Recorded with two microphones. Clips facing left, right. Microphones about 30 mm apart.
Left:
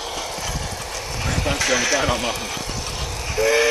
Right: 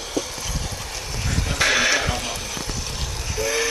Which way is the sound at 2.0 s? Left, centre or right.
Centre.